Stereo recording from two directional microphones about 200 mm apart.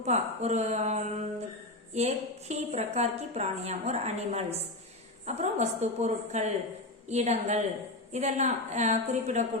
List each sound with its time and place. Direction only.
0.0 s a woman's voice: 35° right (ahead or behind)